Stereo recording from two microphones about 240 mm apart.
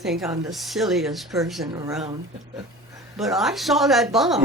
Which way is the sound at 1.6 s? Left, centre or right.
Centre.